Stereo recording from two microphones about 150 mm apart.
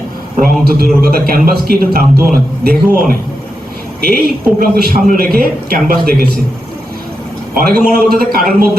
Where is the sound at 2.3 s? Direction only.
75° right (ahead or behind).